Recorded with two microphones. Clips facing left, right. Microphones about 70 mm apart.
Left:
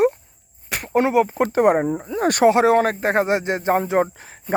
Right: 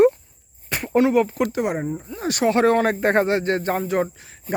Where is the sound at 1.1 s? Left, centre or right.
Left.